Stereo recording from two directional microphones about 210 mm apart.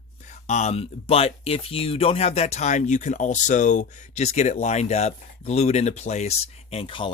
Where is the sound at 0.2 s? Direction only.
35° left (ahead or behind).